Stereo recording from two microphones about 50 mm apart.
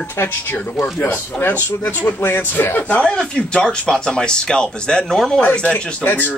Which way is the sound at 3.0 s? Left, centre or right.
Centre.